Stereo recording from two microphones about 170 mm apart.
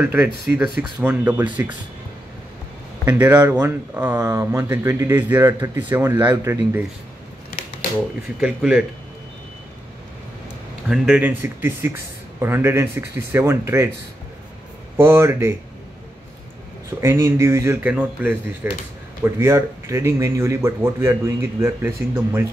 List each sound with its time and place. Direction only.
0.0 s speech: 10° right (ahead or behind)
3.1 s speech: 10° right (ahead or behind)
8.4 s speech: 5° right (ahead or behind)
10.9 s speech: 5° right (ahead or behind)
15.0 s speech: 15° right (ahead or behind)
17.0 s speech: 15° right (ahead or behind)